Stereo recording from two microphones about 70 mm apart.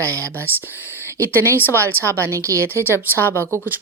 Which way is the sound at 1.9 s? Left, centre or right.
Right.